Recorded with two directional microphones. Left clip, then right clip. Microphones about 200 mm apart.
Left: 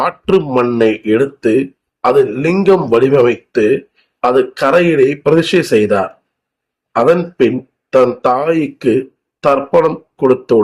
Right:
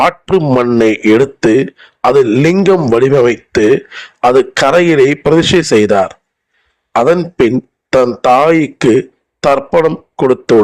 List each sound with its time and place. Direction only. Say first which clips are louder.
0.0 s speech: right 3 dB; 40° right (ahead or behind)